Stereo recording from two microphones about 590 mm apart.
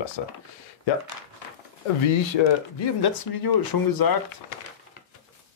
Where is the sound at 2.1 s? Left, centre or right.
Left.